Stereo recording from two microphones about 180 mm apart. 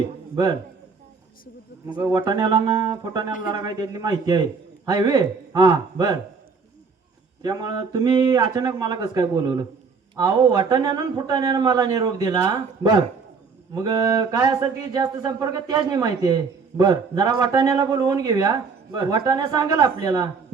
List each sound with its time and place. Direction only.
2.0 s speech: 20° right (ahead or behind)
7.4 s speech: 20° right (ahead or behind)